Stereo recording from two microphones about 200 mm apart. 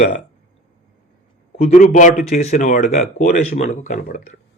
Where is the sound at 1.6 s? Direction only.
40° left (ahead or behind).